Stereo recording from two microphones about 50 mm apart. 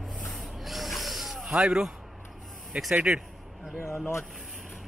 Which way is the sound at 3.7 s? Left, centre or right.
Left.